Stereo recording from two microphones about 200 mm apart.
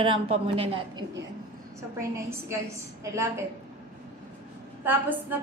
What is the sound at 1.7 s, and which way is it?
Speech, 15° right (ahead or behind).